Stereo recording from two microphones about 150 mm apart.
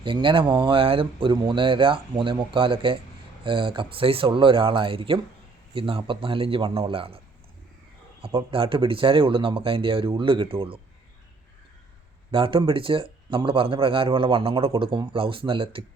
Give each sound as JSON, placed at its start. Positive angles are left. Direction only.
{"t": 0.0, "sound": "speech", "side_deg": -35}
{"t": 8.2, "sound": "speech", "side_deg": -35}
{"t": 12.3, "sound": "speech", "side_deg": -35}